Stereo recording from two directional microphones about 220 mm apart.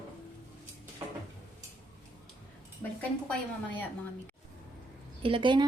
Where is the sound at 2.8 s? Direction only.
10° left (ahead or behind).